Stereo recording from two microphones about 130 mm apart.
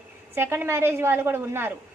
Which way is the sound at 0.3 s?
15° right (ahead or behind).